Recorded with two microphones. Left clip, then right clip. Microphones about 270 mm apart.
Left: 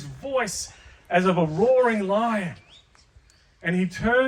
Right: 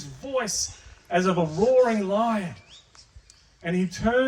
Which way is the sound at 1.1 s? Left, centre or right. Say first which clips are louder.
Left 2 dB; left.